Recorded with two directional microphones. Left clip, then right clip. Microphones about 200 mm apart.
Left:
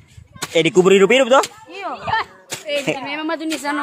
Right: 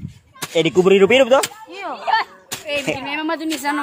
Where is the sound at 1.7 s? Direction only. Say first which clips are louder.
Left 1 dB; 15° left (ahead or behind).